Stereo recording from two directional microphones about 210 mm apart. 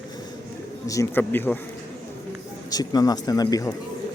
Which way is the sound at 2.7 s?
15° left (ahead or behind).